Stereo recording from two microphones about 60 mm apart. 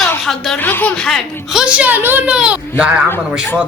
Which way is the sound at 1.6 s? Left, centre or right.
Right.